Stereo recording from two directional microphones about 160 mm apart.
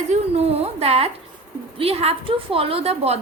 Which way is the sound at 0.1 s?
40° right (ahead or behind).